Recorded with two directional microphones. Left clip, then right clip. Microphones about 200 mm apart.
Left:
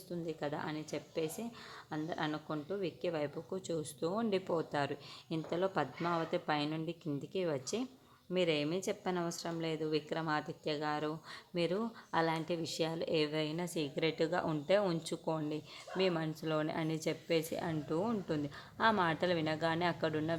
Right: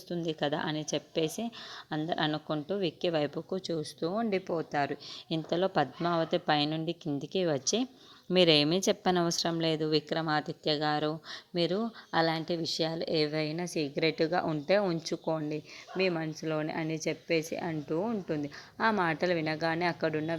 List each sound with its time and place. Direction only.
0.1 s a woman's voice: 30° right (ahead or behind)